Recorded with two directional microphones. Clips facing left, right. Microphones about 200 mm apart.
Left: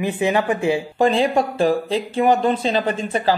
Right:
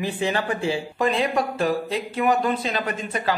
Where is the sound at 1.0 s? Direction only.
30° left (ahead or behind).